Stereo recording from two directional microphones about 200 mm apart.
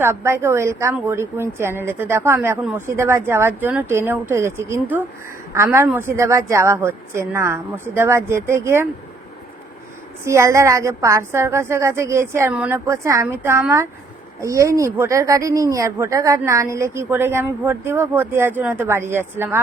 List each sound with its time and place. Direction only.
0.0 s a woman's voice: 10° right (ahead or behind)
10.2 s a woman's voice: 15° right (ahead or behind)